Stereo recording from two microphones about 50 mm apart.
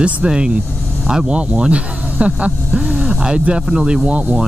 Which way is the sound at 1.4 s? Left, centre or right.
Right.